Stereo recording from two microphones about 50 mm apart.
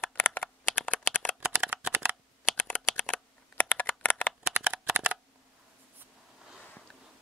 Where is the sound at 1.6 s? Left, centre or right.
Right.